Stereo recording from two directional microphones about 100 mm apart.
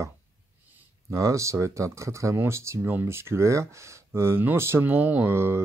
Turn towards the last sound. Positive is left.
turn(degrees=-25)  # may be behind; listen again after turning